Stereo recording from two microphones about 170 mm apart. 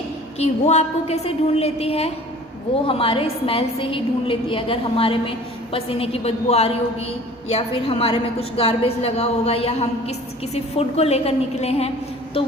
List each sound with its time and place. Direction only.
0.3 s a woman's voice: 40° left (ahead or behind)